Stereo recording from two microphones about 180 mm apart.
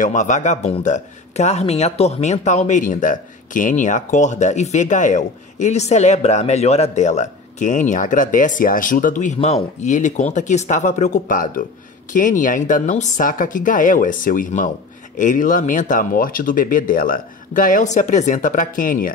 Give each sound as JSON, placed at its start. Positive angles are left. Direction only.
{"t": 0.0, "sound": "speech", "side_deg": 45}